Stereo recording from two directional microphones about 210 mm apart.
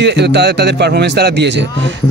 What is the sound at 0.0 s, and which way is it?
Speech, 55° right (ahead or behind).